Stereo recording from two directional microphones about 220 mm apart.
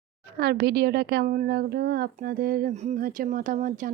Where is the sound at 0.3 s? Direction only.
45° right (ahead or behind).